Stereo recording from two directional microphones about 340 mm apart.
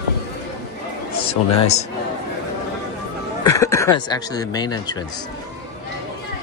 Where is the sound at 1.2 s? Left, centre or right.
Centre.